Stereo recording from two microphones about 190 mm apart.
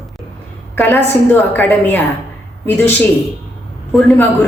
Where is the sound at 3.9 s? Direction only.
Centre (ahead or behind).